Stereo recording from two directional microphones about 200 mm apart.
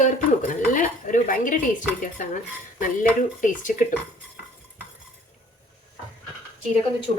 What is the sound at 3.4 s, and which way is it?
Speech, 40° left (ahead or behind).